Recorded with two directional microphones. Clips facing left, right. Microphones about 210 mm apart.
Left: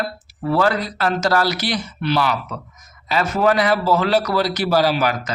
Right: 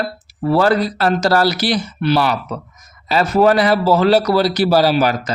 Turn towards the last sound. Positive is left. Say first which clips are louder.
# right 4 dB
turn(degrees=-30)  # may be behind; listen again after turning